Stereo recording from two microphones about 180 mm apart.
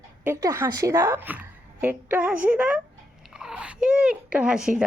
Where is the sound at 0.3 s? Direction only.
15° right (ahead or behind).